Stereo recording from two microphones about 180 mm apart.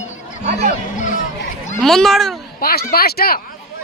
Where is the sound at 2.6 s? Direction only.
55° left (ahead or behind).